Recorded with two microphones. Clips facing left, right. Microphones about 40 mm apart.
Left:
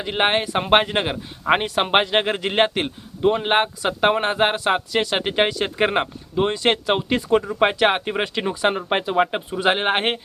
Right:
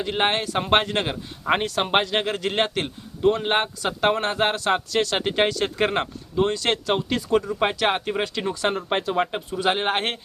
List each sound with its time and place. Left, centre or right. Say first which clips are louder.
0.0 s speech: left 2 dB; centre